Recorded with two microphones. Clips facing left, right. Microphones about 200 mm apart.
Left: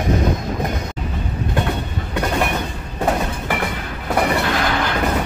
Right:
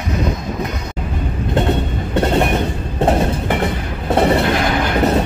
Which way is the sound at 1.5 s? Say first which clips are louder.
Right 6 dB; 25° right (ahead or behind).